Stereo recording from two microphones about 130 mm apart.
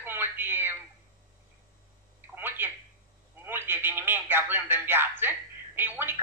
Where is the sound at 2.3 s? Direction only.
15° right (ahead or behind).